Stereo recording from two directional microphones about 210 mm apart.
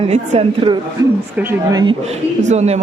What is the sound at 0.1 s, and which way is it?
Speech, 25° right (ahead or behind).